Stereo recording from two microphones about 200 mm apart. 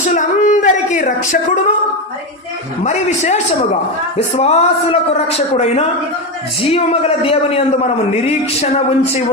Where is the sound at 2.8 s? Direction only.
35° left (ahead or behind).